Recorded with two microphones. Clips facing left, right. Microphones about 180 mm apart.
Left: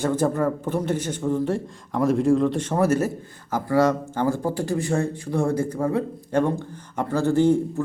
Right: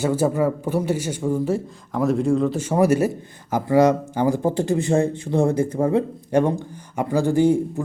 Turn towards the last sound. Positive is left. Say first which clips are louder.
# right 1 dB
turn(degrees=-10)  # may be behind; listen again after turning